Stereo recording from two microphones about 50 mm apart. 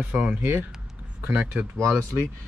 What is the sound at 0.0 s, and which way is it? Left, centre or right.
Speech, right.